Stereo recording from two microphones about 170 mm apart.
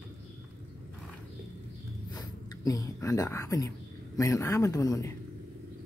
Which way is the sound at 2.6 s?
20° left (ahead or behind).